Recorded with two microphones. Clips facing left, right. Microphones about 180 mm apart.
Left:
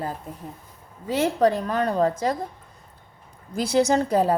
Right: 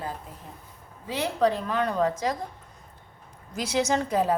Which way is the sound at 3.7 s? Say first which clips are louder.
Left 5 dB; 35° left (ahead or behind).